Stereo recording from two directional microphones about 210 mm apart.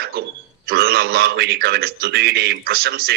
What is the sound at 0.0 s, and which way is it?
A man's voice, 50° right (ahead or behind).